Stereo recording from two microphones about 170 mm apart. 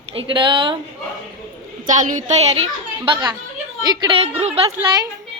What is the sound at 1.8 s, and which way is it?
A woman's voice, 45° right (ahead or behind).